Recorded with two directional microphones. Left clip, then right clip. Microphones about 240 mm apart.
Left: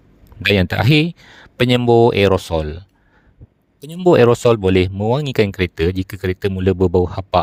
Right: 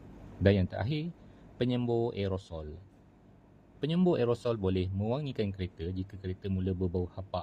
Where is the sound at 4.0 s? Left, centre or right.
Left.